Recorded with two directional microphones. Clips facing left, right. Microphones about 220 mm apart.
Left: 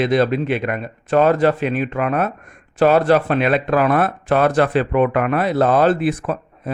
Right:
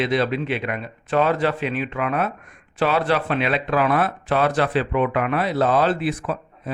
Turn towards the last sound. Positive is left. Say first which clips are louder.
# left 3 dB
turn(degrees=50)  # may be behind; listen again after turning